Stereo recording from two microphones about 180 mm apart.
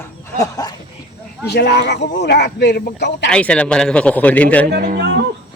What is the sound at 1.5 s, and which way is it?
Speech, 65° left (ahead or behind).